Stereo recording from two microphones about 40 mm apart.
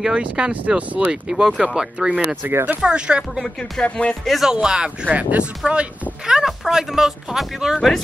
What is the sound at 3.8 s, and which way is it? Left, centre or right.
Speech, left.